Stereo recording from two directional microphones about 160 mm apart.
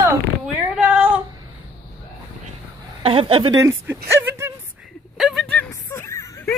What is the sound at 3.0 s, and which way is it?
Speech, 35° right (ahead or behind).